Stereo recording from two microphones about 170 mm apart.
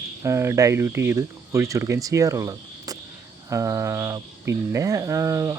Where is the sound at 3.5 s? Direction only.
20° right (ahead or behind).